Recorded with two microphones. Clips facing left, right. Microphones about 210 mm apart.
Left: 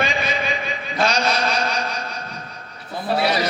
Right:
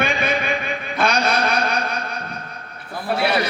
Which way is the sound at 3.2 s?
55° right (ahead or behind).